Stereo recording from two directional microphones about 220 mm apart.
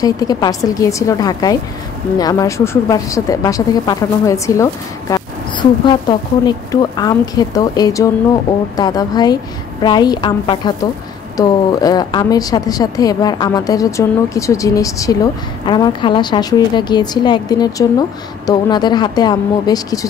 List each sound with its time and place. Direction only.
0.0 s a woman's voice: 15° left (ahead or behind)